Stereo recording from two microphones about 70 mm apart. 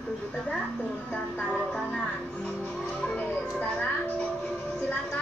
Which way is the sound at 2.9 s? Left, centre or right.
Centre.